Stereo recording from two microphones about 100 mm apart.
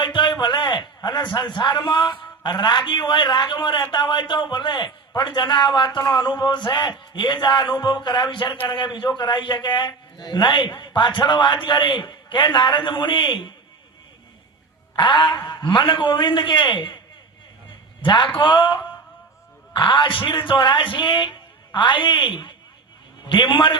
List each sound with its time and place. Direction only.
0.0 s a man's voice: 50° left (ahead or behind)
14.9 s a man's voice: 50° left (ahead or behind)
18.0 s a man's voice: 55° left (ahead or behind)